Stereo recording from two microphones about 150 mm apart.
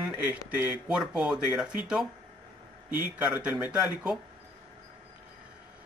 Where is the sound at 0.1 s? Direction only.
15° right (ahead or behind).